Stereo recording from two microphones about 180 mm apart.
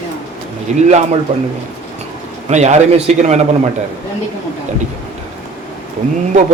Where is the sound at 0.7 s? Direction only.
40° right (ahead or behind).